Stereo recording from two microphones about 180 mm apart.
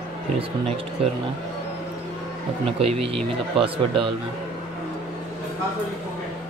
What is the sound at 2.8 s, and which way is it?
Speech, 30° right (ahead or behind).